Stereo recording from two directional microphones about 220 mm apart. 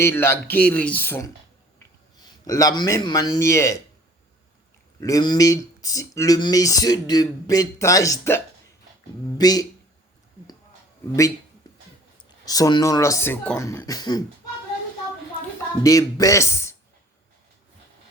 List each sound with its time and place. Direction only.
0.0 s a man's voice: 10° left (ahead or behind)
4.9 s speech: 15° left (ahead or behind)
9.4 s speech: 15° left (ahead or behind)
12.5 s speech: 15° left (ahead or behind)
15.8 s speech: 15° left (ahead or behind)